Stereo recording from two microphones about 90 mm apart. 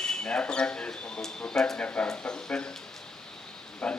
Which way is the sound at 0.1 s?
10° left (ahead or behind).